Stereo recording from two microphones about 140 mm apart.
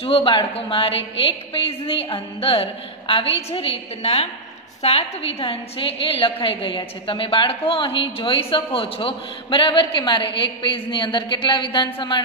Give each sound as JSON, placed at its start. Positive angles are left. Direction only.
{"t": 0.0, "sound": "a woman's voice", "side_deg": 40}